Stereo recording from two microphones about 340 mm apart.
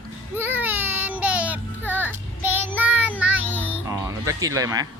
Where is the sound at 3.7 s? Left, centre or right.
Centre.